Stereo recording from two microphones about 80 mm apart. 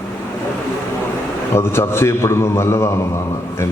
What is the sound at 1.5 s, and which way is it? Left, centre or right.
A man's voice, left.